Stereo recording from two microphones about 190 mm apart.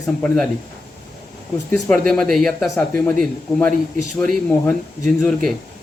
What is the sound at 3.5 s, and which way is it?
Speech, centre (ahead or behind).